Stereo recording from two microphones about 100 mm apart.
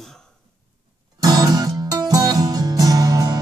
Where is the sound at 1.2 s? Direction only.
40° right (ahead or behind).